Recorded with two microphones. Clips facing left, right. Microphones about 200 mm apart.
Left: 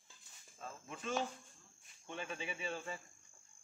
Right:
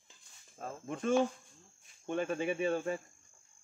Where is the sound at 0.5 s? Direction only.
50° right (ahead or behind).